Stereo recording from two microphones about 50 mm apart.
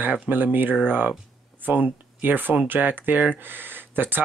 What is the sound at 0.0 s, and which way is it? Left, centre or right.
Speech, right.